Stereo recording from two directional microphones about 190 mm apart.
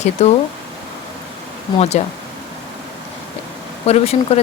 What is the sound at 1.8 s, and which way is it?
Speech, 35° left (ahead or behind).